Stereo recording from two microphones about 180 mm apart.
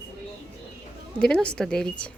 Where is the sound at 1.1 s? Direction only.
5° left (ahead or behind).